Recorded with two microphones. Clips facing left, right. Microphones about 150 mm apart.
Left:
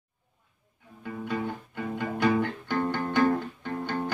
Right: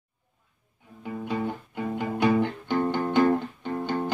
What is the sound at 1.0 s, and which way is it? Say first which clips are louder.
Music: right 2 dB; 15° right (ahead or behind).